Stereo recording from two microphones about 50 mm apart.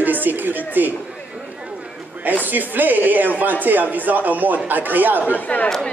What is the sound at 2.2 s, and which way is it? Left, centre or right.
A man's voice, right.